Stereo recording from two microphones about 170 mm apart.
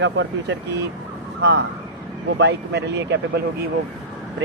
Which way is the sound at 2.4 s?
85° right.